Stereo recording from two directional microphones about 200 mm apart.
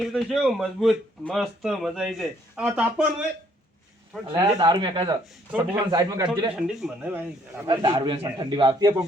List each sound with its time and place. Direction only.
0.0 s speech: centre (ahead or behind)
4.3 s a man's voice: 20° right (ahead or behind)
6.6 s speech: 5° right (ahead or behind)
7.7 s a man's voice: 20° right (ahead or behind)